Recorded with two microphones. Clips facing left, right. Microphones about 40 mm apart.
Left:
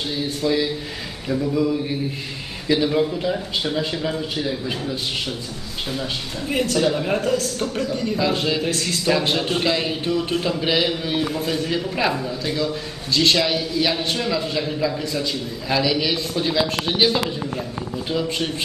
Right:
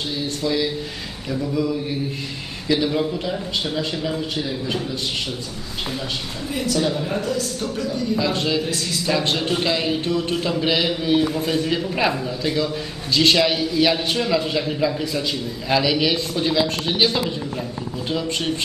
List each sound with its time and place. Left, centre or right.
0.4 s a man's voice: centre
6.5 s a man's voice: left
6.9 s a man's voice: left
7.2 s a man's voice: left
8.2 s a man's voice: centre
8.6 s a man's voice: left
9.0 s a man's voice: centre